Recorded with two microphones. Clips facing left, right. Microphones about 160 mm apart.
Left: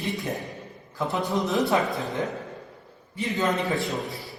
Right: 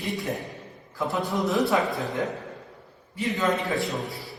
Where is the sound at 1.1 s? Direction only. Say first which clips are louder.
Even; 20° left (ahead or behind).